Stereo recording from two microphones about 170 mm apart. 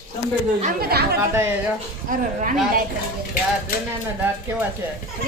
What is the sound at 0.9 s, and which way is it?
Speech, 70° right (ahead or behind).